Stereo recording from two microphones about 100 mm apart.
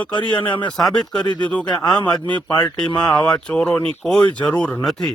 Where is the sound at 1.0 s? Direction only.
45° left (ahead or behind).